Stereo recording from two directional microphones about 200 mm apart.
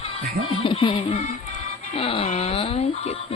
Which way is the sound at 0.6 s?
25° left (ahead or behind).